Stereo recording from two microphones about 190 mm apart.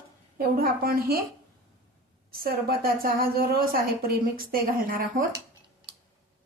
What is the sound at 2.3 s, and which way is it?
A woman's voice, 55° right (ahead or behind).